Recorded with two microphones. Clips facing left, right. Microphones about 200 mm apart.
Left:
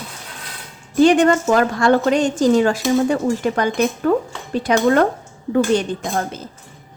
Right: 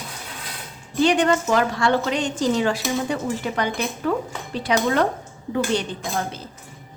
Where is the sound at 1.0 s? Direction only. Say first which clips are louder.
Left 6 dB; 45° left (ahead or behind).